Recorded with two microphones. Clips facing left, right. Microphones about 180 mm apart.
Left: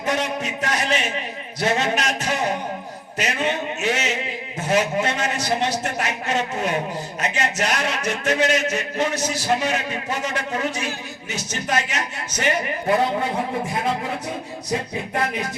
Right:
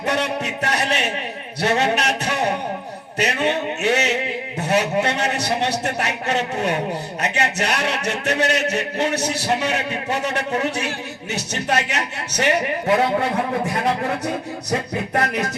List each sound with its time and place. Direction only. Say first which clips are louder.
0.0 s a man's voice: right 2 dB; 65° right (ahead or behind)
14.7 s a man's voice: right 2 dB; 70° right (ahead or behind)